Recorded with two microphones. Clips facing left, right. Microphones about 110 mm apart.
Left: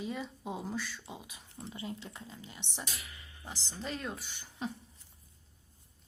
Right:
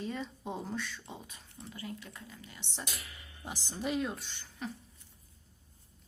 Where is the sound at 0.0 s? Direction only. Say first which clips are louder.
Even; 5° left (ahead or behind).